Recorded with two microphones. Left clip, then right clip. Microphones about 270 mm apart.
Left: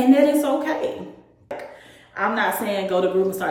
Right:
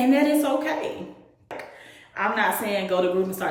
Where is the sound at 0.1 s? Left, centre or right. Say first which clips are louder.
Left 7 dB; centre.